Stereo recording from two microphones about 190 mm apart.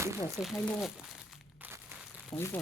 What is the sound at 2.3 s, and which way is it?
Speech, 10° left (ahead or behind).